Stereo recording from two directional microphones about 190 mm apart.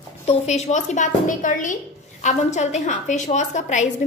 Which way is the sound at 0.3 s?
35° left (ahead or behind).